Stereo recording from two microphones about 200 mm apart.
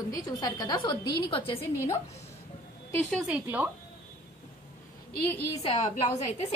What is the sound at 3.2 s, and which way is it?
Speech, 5° right (ahead or behind).